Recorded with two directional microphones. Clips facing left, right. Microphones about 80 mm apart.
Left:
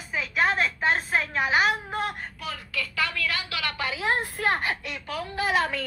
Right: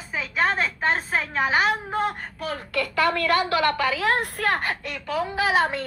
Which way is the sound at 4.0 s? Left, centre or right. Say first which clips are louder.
Right 3 dB; right.